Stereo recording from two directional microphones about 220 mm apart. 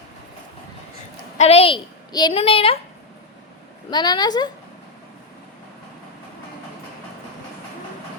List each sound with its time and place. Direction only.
1.4 s a child's voice: 30° left (ahead or behind)
3.8 s a child's voice: 20° left (ahead or behind)